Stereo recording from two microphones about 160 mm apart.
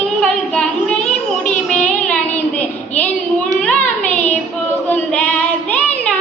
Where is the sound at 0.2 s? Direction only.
5° left (ahead or behind).